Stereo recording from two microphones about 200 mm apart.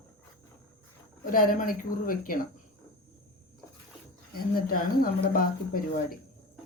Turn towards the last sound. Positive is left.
turn(degrees=45)  # may be behind; listen again after turning